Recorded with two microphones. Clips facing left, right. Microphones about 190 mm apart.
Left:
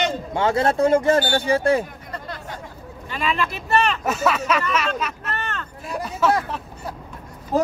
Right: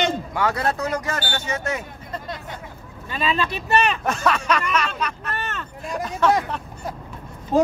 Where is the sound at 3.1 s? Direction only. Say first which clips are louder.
Right 1 dB; 20° right (ahead or behind).